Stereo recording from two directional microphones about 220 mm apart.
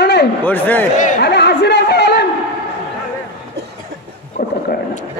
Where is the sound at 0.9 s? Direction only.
35° left (ahead or behind).